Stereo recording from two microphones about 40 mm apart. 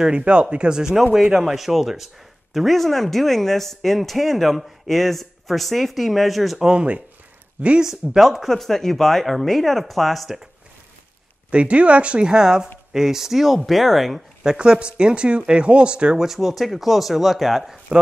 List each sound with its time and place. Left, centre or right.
0.0 s speech: right
1.3 s speech: centre
6.6 s speech: right
7.6 s speech: right
8.2 s speech: centre
8.5 s speech: centre
11.5 s speech: right; by 14.2 s centre
14.4 s speech: centre
16.2 s speech: centre